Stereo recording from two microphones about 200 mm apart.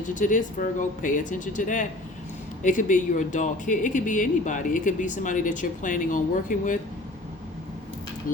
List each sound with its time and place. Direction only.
0.0 s speech: 40° left (ahead or behind)